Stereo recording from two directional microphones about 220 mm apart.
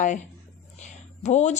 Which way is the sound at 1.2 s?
30° left (ahead or behind).